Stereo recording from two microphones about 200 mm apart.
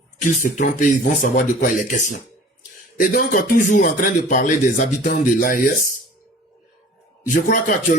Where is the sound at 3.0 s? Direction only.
45° left (ahead or behind).